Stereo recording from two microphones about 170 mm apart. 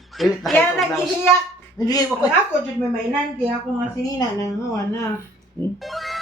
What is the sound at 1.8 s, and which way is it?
Speech, 20° left (ahead or behind).